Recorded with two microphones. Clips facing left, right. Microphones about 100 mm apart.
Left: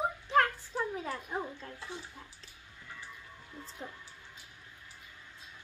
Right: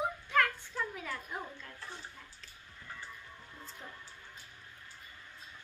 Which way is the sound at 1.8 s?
15° left (ahead or behind).